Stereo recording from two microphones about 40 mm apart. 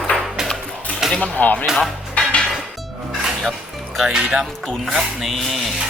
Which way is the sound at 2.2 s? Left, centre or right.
Left.